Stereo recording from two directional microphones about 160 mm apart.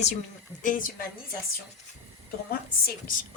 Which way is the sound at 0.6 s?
55° left (ahead or behind).